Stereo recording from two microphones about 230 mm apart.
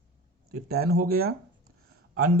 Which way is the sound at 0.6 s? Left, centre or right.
Right.